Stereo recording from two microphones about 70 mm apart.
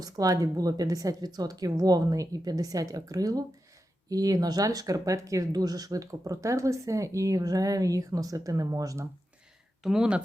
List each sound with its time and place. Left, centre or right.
0.0 s speech: right
9.8 s speech: centre